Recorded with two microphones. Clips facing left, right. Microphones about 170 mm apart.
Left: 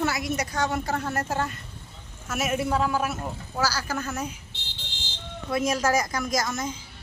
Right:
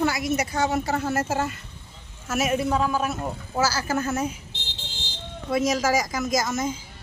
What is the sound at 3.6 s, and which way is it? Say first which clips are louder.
Speech: right 3 dB; 20° right (ahead or behind).